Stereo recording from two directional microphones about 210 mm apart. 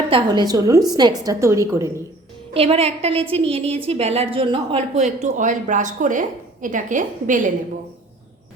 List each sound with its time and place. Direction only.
0.1 s a woman's voice: 20° right (ahead or behind)
2.5 s a woman's voice: 30° right (ahead or behind)